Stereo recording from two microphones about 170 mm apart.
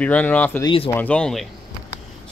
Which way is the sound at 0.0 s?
10° left (ahead or behind).